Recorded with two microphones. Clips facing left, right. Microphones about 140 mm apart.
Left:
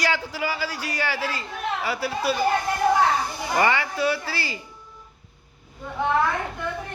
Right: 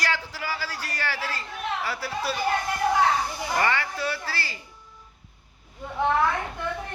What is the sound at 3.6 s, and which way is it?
A man's voice, 15° left (ahead or behind).